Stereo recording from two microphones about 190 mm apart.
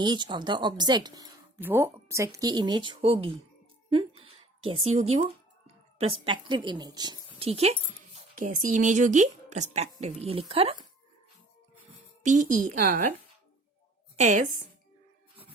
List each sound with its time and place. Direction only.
0.0 s a woman's voice: 25° right (ahead or behind)
8.4 s a woman's voice: 45° right (ahead or behind)
12.2 s a woman's voice: 40° right (ahead or behind)
14.2 s a woman's voice: 40° right (ahead or behind)